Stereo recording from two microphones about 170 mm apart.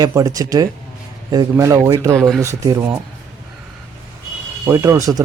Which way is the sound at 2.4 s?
15° right (ahead or behind).